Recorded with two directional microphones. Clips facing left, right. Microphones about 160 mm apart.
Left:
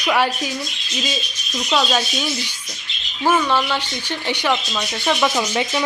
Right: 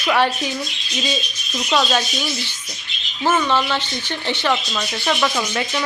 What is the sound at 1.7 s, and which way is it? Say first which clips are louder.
Speech: even; 5° left (ahead or behind).